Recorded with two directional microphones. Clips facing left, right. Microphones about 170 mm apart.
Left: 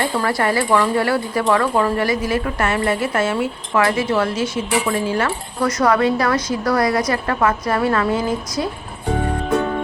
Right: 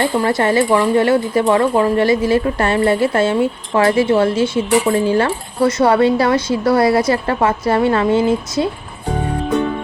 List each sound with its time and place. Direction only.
0.0 s speech: 25° right (ahead or behind)